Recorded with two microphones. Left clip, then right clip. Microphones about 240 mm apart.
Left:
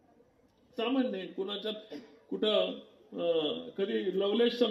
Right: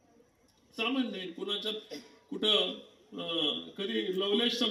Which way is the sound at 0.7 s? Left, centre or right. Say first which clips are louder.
Left 1 dB; right.